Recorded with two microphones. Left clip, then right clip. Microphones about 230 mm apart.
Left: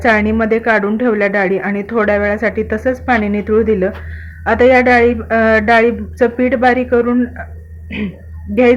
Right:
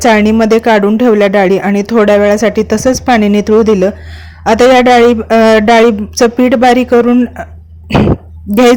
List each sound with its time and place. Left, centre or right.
0.0 s speech: right